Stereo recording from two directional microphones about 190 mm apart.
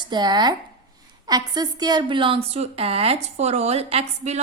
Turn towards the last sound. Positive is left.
turn(degrees=-35)  # may be behind; listen again after turning